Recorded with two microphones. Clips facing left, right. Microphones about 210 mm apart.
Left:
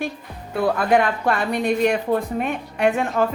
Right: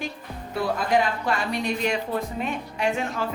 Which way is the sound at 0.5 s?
55° left (ahead or behind).